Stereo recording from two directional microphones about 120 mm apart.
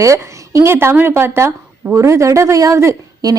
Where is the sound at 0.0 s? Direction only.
25° right (ahead or behind).